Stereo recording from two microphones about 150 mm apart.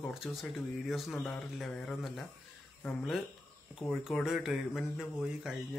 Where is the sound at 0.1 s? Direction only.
Centre (ahead or behind).